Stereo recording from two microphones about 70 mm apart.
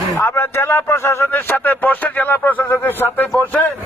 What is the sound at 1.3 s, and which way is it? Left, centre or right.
Speech, left.